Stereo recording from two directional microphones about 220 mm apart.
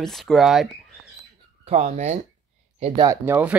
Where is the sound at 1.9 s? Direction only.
30° right (ahead or behind).